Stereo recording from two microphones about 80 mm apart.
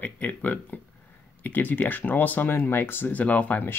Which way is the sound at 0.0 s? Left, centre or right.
Centre.